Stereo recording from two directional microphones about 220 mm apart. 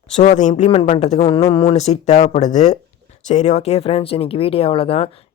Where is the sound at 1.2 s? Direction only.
20° left (ahead or behind).